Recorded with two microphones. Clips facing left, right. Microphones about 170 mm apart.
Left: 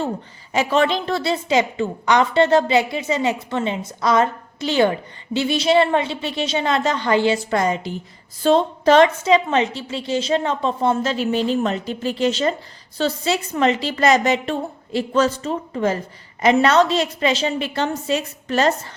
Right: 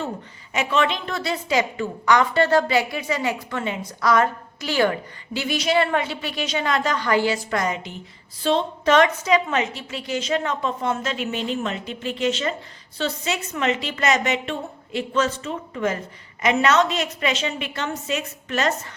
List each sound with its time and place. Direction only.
0.5 s a woman's voice: 35° left (ahead or behind)